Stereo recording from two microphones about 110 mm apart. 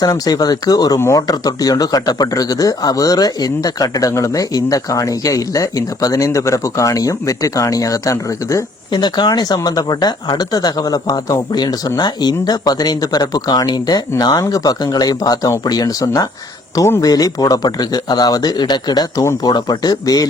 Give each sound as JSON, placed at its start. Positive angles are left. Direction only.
{"t": 0.0, "sound": "speech", "side_deg": 35}
{"t": 8.9, "sound": "speech", "side_deg": 45}